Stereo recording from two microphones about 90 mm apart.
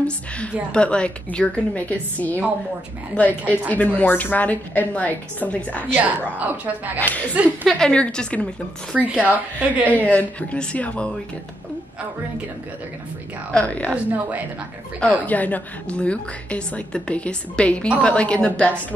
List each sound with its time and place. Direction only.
0.7 s a woman's voice: 10° left (ahead or behind)
5.9 s speech: 20° right (ahead or behind)
7.0 s a woman's voice: 20° left (ahead or behind)
8.9 s speech: 15° right (ahead or behind)
9.8 s a woman's voice: 15° left (ahead or behind)
13.5 s a woman's voice: 15° left (ahead or behind)
13.9 s speech: 15° right (ahead or behind)
15.0 s a woman's voice: 15° left (ahead or behind)